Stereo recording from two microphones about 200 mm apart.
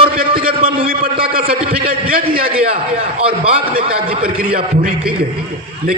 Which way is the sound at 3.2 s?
30° right (ahead or behind).